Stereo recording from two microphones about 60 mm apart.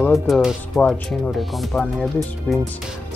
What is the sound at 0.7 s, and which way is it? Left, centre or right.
Speech, centre.